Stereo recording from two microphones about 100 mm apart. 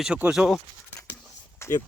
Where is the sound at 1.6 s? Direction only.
25° left (ahead or behind).